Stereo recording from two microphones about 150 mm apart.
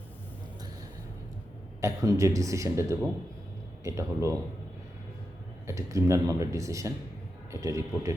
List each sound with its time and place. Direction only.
1.8 s speech: 20° right (ahead or behind)
5.6 s speech: 20° right (ahead or behind)